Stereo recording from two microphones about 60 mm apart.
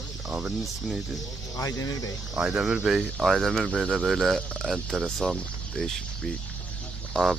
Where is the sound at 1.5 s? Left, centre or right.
Left.